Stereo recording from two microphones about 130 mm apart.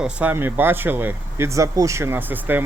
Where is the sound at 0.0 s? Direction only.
10° right (ahead or behind).